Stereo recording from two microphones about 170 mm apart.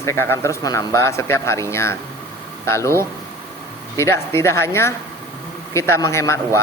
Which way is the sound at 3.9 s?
15° left (ahead or behind).